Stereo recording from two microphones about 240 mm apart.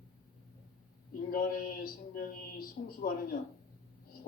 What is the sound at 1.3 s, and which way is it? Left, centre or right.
Speech, left.